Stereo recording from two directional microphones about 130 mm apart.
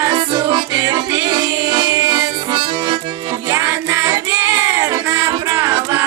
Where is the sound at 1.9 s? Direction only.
30° right (ahead or behind).